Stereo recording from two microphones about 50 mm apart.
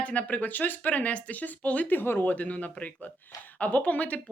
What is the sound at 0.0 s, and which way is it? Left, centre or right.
Speech, left.